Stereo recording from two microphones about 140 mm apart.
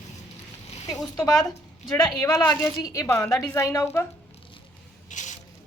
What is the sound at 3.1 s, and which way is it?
Speech, 5° left (ahead or behind).